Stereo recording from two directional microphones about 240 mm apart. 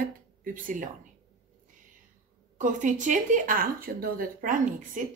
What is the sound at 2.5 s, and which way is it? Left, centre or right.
A woman's voice, right.